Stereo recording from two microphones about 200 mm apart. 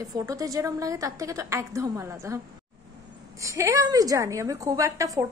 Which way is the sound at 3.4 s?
15° right (ahead or behind).